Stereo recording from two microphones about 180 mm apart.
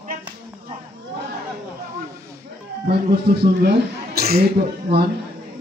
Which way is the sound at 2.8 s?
60° right (ahead or behind).